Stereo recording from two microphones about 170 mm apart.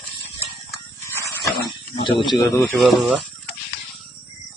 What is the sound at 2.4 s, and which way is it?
Speech, centre (ahead or behind).